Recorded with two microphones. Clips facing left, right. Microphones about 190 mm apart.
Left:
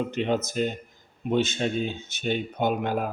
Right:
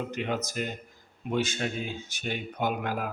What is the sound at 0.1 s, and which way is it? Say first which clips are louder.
Speech: left 5 dB; 25° left (ahead or behind).